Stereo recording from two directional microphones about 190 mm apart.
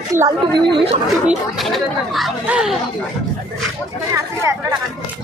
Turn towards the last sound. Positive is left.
turn(degrees=-15)  # may be behind; listen again after turning